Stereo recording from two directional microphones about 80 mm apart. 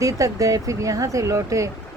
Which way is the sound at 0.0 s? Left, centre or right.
Right.